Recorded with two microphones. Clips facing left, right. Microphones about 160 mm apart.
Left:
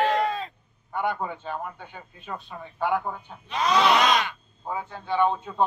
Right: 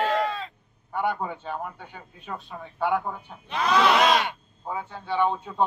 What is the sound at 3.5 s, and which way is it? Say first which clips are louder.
Goat: even; 60° right (ahead or behind).